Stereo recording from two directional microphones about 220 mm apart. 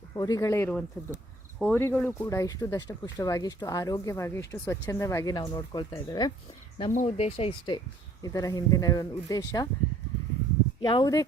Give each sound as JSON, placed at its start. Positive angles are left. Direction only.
{"t": 0.1, "sound": "speech", "side_deg": 15}
{"t": 6.7, "sound": "speech", "side_deg": 30}
{"t": 8.2, "sound": "speech", "side_deg": 15}
{"t": 10.8, "sound": "speech", "side_deg": 20}